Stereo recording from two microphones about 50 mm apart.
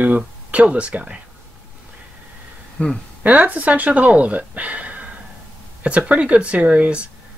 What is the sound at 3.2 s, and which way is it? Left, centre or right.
Speech, right.